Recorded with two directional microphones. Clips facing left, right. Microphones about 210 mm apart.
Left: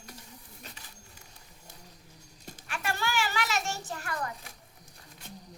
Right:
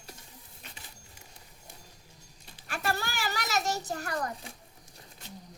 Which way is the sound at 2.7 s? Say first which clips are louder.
Even; 40° right (ahead or behind).